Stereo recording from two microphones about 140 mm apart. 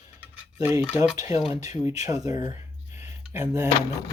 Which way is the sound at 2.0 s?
25° right (ahead or behind).